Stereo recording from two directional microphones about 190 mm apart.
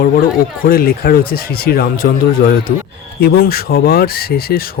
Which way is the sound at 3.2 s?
55° left (ahead or behind).